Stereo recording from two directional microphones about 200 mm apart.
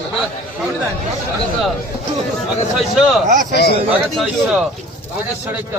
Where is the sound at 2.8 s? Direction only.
Centre (ahead or behind).